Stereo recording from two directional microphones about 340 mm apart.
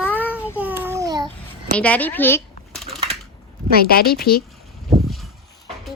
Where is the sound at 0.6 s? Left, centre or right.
Centre.